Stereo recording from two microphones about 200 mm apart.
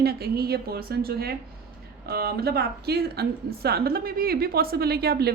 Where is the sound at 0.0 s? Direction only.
50° right (ahead or behind).